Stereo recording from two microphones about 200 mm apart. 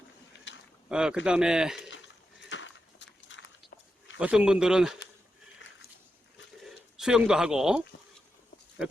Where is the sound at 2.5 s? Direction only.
65° left (ahead or behind).